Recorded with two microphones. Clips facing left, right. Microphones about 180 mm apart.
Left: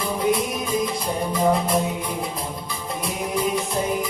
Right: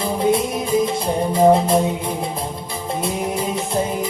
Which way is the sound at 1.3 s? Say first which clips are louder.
Right 7 dB; 25° right (ahead or behind).